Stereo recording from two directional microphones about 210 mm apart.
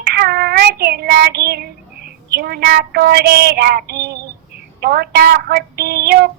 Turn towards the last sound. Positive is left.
turn(degrees=-50)  # may be behind; listen again after turning